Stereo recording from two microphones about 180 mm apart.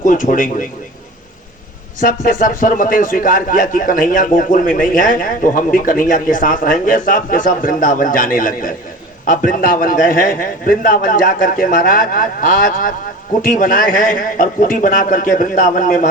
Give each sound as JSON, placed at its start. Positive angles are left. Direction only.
{"t": 0.0, "sound": "speech", "side_deg": 50}
{"t": 2.0, "sound": "speech", "side_deg": 50}